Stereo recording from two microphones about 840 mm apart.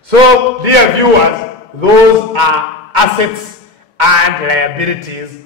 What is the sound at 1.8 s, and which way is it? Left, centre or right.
Speech, right.